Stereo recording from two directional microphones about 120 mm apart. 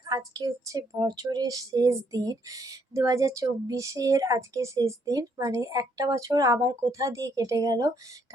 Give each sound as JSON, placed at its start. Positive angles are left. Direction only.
{"t": 0.0, "sound": "a woman's voice", "side_deg": -35}